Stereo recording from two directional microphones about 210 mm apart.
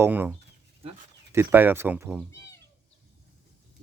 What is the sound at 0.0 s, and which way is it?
Speech, 10° right (ahead or behind).